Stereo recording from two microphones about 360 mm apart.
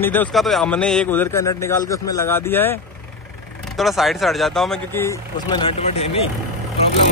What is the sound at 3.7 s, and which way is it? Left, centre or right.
Speech, centre.